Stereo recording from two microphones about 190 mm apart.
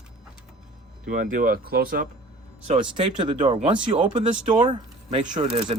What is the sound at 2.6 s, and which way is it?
Speech, 30° right (ahead or behind).